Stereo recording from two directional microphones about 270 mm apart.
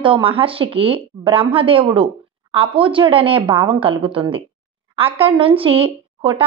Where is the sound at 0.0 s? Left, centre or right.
Centre.